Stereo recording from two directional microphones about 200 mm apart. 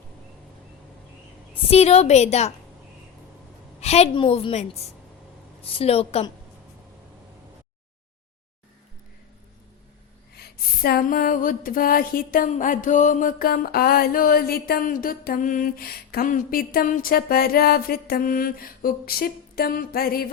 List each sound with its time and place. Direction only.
1.5 s a woman's voice: 30° left (ahead or behind)
3.8 s a woman's voice: 30° left (ahead or behind)
10.3 s a sound: 50° left (ahead or behind)